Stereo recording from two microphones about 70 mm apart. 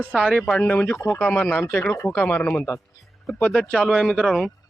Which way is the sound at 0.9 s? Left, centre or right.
Left.